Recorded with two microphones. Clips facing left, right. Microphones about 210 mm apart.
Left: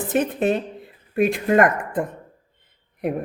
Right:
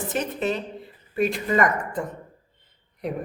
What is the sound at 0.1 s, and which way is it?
A woman's voice, 55° left (ahead or behind).